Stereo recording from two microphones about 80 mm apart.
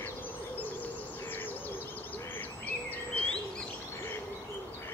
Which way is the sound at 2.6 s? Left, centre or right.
Centre.